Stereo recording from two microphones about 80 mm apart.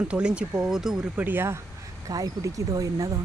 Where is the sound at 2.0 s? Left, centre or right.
Right.